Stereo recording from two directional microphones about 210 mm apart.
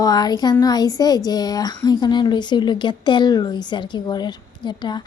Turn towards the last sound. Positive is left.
turn(degrees=20)  # may be behind; listen again after turning